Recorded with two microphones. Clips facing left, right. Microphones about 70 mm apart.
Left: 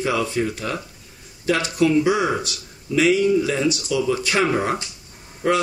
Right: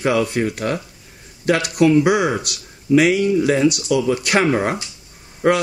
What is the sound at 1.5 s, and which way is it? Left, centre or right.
Speech, right.